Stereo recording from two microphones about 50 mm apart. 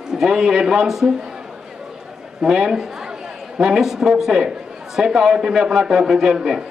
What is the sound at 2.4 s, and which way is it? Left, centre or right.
Speech, centre.